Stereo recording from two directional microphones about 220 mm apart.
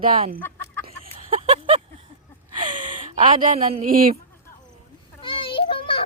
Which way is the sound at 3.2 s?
35° right (ahead or behind).